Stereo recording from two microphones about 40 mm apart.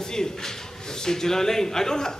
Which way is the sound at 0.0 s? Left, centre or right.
Centre.